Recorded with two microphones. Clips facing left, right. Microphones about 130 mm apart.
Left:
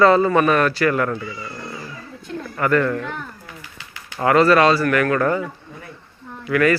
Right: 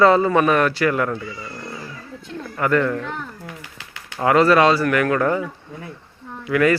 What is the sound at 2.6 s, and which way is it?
Speech, 15° right (ahead or behind).